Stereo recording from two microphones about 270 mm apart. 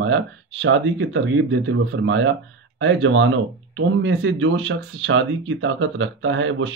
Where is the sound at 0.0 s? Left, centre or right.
Right.